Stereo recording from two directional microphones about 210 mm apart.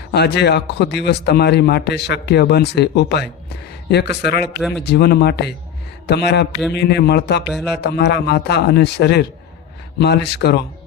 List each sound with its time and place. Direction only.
0.1 s a man's voice: 50° left (ahead or behind)
7.4 s speech: centre (ahead or behind)
7.8 s a man's voice: 50° left (ahead or behind)